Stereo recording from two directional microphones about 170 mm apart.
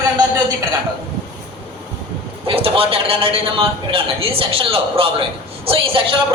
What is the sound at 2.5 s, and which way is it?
A man's voice, 35° right (ahead or behind).